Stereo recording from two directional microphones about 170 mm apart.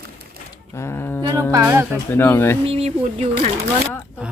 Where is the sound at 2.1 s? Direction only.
15° left (ahead or behind).